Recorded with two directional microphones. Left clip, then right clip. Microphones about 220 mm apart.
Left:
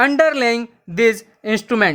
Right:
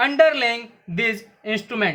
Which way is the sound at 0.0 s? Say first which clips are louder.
Left 2 dB; 45° left (ahead or behind).